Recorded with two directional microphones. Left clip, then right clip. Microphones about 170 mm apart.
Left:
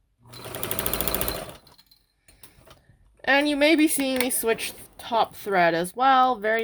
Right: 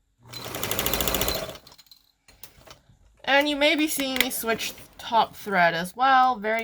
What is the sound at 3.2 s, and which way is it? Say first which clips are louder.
A woman's voice: left 1 dB; 55° left (ahead or behind).